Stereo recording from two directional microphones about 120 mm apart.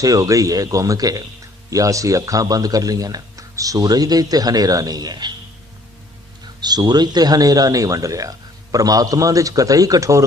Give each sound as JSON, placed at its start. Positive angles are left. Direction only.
{"t": 0.0, "sound": "a man's voice", "side_deg": -30}
{"t": 6.6, "sound": "a man's voice", "side_deg": -35}